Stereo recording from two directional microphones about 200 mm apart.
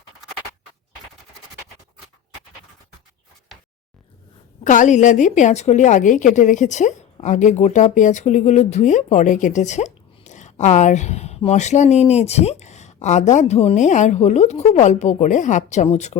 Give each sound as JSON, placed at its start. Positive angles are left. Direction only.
{"t": 4.6, "sound": "a woman's voice", "side_deg": 40}